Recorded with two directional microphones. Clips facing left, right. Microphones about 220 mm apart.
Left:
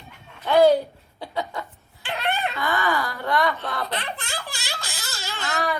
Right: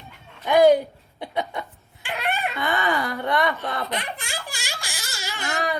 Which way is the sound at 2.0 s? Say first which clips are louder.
Left 1 dB; 15° right (ahead or behind).